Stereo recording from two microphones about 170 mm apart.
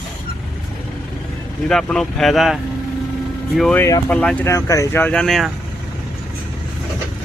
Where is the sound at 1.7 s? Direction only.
5° left (ahead or behind).